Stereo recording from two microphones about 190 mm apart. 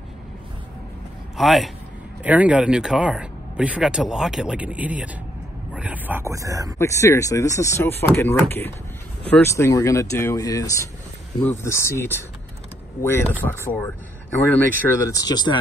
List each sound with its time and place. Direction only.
1.3 s speech: centre (ahead or behind); by 6.7 s 15° right (ahead or behind)
6.8 s speech: 15° left (ahead or behind)